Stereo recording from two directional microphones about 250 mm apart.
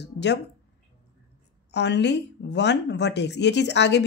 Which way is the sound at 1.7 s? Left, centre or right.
Left.